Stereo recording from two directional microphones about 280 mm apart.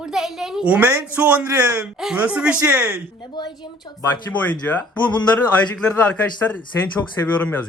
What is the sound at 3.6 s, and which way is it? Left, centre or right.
Speech, centre.